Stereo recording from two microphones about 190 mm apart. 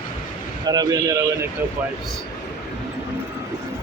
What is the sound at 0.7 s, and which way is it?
Speech, 20° right (ahead or behind).